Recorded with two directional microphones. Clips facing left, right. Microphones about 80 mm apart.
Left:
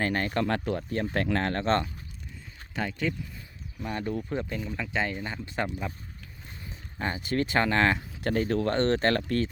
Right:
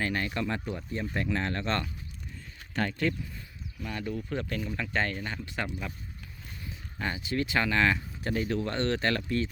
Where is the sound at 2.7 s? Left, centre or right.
Centre.